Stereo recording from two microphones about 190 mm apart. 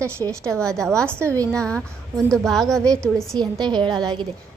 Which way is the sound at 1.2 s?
15° right (ahead or behind).